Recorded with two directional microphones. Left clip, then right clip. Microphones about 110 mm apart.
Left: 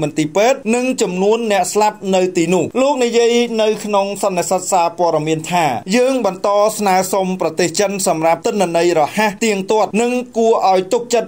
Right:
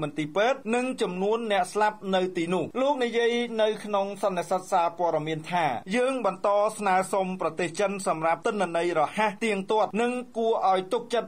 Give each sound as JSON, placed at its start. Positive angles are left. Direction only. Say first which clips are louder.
{"t": 0.0, "sound": "speech", "louder": "left 11 dB", "side_deg": 35}
{"t": 5.5, "sound": "speech", "louder": "left 9 dB", "side_deg": 40}
{"t": 6.8, "sound": "speech", "louder": "left 10 dB", "side_deg": 50}
{"t": 8.1, "sound": "speech", "louder": "left 12 dB", "side_deg": 40}